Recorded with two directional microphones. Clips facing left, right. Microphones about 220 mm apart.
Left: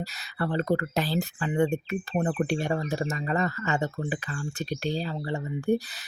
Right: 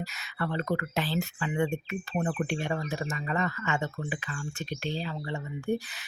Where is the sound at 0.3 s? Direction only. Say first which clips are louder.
Left 4 dB; 35° left (ahead or behind).